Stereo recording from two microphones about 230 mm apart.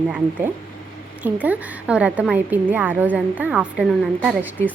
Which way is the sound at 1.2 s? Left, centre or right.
Centre.